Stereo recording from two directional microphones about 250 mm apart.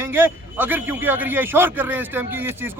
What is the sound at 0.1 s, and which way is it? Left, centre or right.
A man's voice, centre.